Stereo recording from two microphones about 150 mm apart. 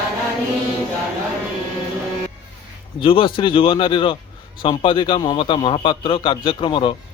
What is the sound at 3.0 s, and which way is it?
A man's voice, 35° left (ahead or behind).